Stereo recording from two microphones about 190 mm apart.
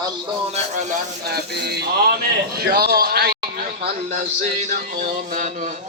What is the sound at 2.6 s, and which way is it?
Speech, 55° right (ahead or behind).